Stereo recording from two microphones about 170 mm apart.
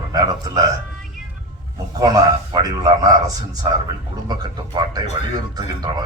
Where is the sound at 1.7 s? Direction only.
25° right (ahead or behind).